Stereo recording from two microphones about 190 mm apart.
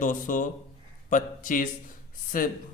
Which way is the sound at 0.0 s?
45° left (ahead or behind).